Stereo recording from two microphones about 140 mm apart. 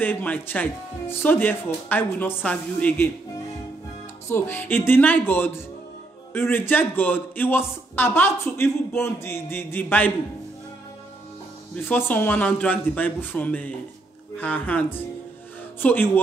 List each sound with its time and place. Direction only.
0.0 s a man's voice: 10° left (ahead or behind)
4.3 s a man's voice: 15° left (ahead or behind)
11.7 s a man's voice: 10° left (ahead or behind)